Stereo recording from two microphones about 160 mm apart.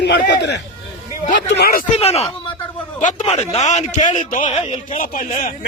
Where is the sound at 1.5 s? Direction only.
80° left.